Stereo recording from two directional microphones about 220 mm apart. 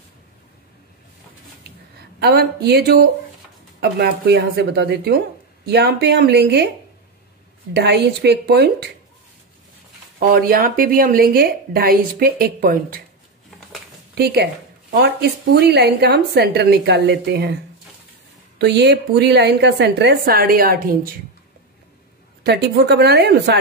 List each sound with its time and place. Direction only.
2.1 s a woman's voice: 45° right (ahead or behind)
7.7 s a woman's voice: 50° right (ahead or behind)
10.1 s a woman's voice: 40° right (ahead or behind)
14.1 s a woman's voice: 45° right (ahead or behind)
18.6 s a woman's voice: 50° right (ahead or behind)
22.4 s a woman's voice: 50° right (ahead or behind)